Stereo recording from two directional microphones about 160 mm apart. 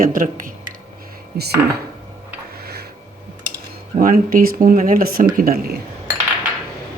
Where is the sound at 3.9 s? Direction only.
60° right (ahead or behind).